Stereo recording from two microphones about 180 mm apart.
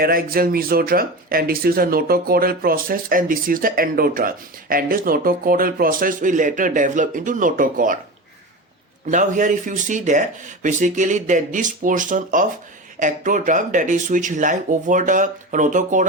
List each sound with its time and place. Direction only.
0.0 s speech: 55° right (ahead or behind)
9.0 s speech: 45° right (ahead or behind)